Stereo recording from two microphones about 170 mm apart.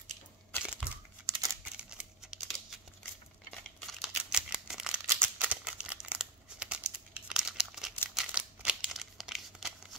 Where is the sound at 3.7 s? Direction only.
Centre (ahead or behind).